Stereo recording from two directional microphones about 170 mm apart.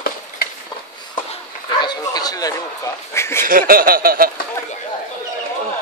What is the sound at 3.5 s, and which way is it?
Speech, 55° right (ahead or behind).